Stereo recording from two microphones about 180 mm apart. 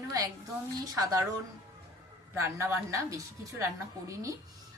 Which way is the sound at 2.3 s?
15° right (ahead or behind).